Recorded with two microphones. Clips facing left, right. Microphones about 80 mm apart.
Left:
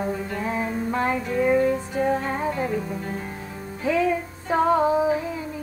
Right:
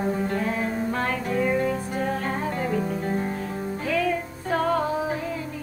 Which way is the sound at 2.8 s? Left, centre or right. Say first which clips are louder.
Right 4 dB; right.